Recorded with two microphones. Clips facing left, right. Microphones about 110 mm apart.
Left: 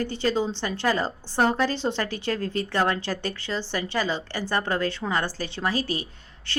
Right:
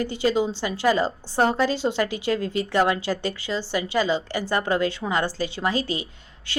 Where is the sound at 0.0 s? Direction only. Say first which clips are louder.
Right 2 dB; 15° right (ahead or behind).